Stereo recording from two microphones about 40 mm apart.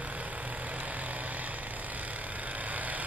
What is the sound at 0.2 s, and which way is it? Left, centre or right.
Vehicle, right.